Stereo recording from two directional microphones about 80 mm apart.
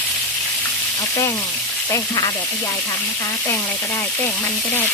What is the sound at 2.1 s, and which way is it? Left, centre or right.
Speech, left.